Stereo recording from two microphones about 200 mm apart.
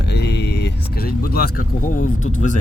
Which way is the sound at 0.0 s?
55° left (ahead or behind).